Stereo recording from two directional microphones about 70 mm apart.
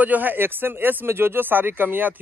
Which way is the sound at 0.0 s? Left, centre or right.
Right.